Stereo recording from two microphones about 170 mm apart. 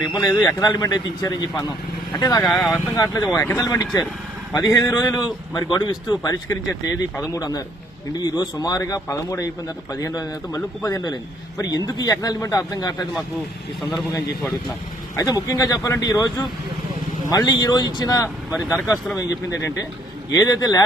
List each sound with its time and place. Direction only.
0.0 s speech: 20° left (ahead or behind)
15.1 s speech: 15° left (ahead or behind)